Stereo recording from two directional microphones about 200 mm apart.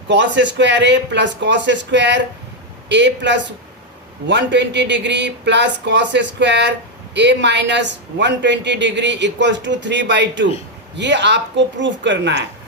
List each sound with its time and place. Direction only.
0.1 s speech: 60° right (ahead or behind)